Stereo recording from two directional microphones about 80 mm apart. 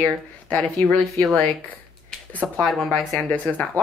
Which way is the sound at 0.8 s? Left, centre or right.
Left.